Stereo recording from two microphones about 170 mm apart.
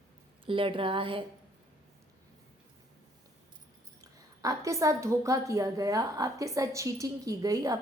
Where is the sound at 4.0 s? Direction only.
20° right (ahead or behind).